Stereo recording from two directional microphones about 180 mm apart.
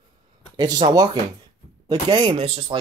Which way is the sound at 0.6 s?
25° right (ahead or behind).